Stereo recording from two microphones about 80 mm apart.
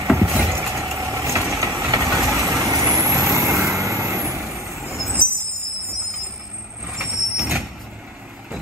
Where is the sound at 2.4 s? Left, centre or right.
Right.